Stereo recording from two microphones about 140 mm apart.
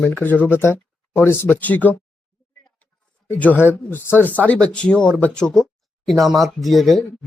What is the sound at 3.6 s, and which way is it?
Speech, 15° left (ahead or behind).